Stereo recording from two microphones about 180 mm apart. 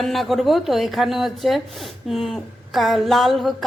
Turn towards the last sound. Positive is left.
turn(degrees=0)  # may be behind; listen again after turning